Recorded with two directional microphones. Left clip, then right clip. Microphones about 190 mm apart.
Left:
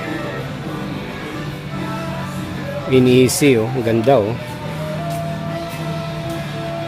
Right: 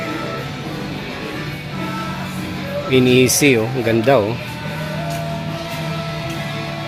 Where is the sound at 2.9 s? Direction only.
10° left (ahead or behind).